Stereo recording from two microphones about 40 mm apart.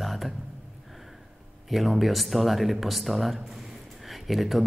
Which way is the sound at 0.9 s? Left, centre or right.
Centre.